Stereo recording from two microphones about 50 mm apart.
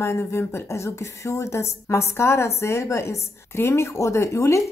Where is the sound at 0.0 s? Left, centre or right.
Left.